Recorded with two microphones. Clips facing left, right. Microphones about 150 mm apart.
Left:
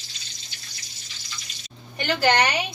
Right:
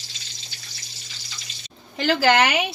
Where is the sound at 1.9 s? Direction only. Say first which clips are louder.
Right 3 dB; 90° right.